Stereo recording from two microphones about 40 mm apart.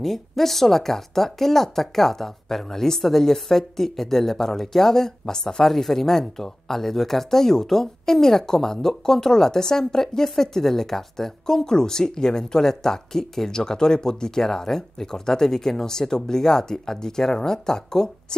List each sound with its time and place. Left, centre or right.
0.0 s speech: centre